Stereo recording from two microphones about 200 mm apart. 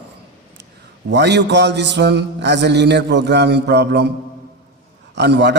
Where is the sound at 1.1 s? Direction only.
60° right (ahead or behind).